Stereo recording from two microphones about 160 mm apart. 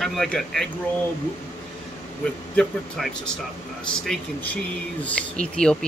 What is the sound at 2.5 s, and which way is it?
Speech, 5° left (ahead or behind).